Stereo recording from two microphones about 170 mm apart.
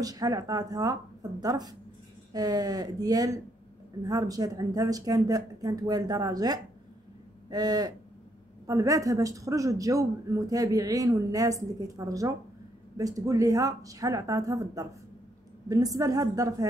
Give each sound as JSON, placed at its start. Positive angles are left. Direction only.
{"t": 0.0, "sound": "speech", "side_deg": -20}
{"t": 7.4, "sound": "a sound", "side_deg": -25}
{"t": 8.6, "sound": "speech", "side_deg": -20}